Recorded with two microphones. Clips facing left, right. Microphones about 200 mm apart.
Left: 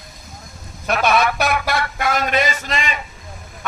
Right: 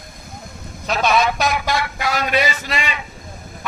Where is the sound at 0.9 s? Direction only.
60° left (ahead or behind).